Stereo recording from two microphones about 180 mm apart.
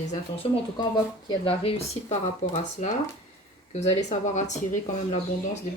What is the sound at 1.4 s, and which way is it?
Speech, 30° left (ahead or behind).